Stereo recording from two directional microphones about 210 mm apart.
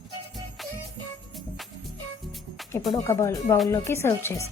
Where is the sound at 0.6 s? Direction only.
Centre (ahead or behind).